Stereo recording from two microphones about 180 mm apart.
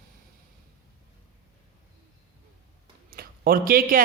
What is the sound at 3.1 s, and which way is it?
Speech, 55° right (ahead or behind).